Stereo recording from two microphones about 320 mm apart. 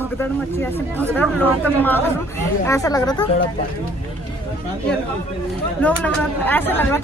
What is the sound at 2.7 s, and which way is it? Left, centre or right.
Speech, centre.